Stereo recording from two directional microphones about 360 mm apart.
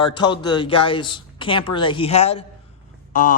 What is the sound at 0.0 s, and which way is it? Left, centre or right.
Speech, centre.